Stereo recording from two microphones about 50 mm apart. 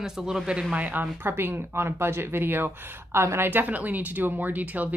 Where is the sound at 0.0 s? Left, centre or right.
Centre.